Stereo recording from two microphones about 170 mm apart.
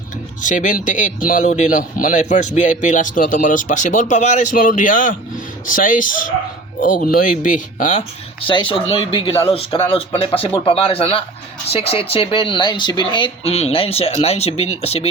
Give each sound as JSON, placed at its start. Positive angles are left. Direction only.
{"t": 0.4, "sound": "speech", "side_deg": 50}
{"t": 8.4, "sound": "speech", "side_deg": 30}